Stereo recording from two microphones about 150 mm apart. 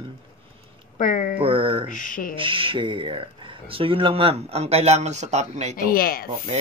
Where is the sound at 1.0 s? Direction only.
60° left (ahead or behind).